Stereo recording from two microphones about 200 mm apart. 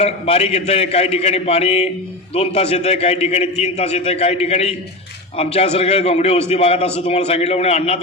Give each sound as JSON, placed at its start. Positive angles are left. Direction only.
{"t": 0.0, "sound": "a man's voice", "side_deg": 30}